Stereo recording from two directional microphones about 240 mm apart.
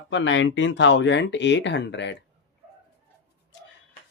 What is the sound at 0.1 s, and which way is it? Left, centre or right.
Speech, left.